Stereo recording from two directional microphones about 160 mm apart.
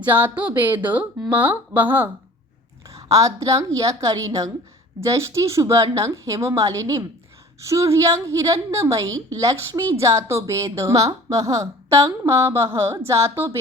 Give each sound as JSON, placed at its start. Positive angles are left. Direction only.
{"t": 0.0, "sound": "speech", "side_deg": -10}
{"t": 3.1, "sound": "a woman's voice", "side_deg": -20}